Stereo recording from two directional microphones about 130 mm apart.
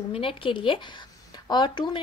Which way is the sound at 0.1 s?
45° left (ahead or behind).